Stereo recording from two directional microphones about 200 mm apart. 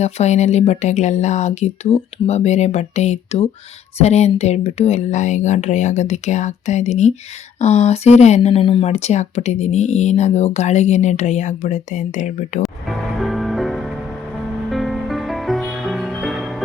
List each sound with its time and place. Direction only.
0.0 s speech: 35° left (ahead or behind)
13.2 s music: centre (ahead or behind)